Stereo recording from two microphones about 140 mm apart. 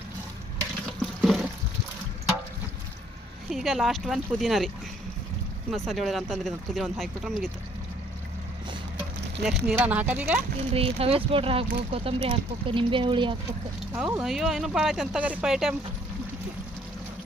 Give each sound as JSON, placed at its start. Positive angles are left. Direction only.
{"t": 1.2, "sound": "water", "side_deg": 0}
{"t": 3.5, "sound": "speech", "side_deg": 0}
{"t": 5.7, "sound": "speech", "side_deg": 0}
{"t": 9.4, "sound": "speech", "side_deg": 0}
{"t": 10.8, "sound": "speech", "side_deg": -45}
{"t": 13.9, "sound": "speech", "side_deg": -5}